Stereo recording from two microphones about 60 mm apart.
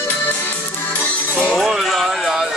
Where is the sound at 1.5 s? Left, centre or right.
Centre.